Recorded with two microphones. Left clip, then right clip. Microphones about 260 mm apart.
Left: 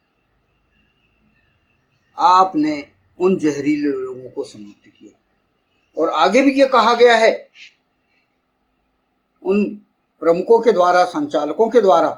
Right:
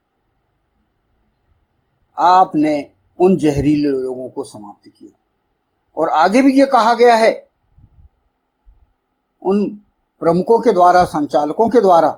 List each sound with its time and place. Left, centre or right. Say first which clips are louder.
2.1 s a man's voice: right 2 dB; right
5.9 s a man's voice: right 2 dB; right
9.4 s a man's voice: right 1 dB; right